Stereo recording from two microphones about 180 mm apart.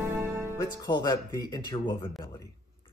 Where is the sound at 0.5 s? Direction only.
20° left (ahead or behind).